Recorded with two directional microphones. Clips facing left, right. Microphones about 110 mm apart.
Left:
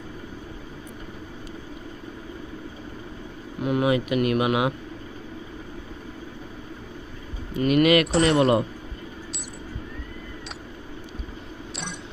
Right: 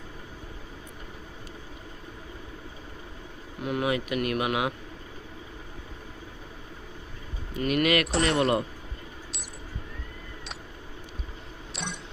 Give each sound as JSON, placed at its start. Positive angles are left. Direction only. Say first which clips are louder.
{"t": 3.6, "sound": "speech", "louder": "left 5 dB", "side_deg": 20}
{"t": 7.6, "sound": "speech", "louder": "left 6 dB", "side_deg": 15}
{"t": 8.0, "sound": "speech", "louder": "left 5 dB", "side_deg": 0}
{"t": 11.7, "sound": "a sound", "louder": "even", "side_deg": 0}